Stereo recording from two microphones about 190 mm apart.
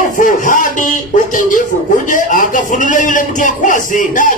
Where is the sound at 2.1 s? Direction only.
45° left (ahead or behind).